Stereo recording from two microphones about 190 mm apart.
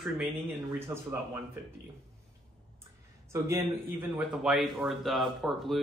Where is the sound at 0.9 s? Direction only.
15° right (ahead or behind).